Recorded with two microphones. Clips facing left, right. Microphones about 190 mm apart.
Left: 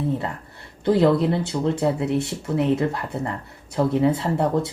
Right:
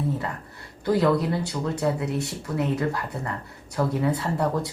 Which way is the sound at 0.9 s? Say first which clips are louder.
Left 4 dB; 25° left (ahead or behind).